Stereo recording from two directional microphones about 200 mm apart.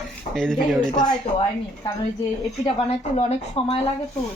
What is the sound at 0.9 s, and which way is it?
Speech, 25° left (ahead or behind).